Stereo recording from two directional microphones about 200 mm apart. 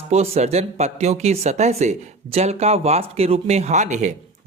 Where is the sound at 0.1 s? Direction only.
30° right (ahead or behind).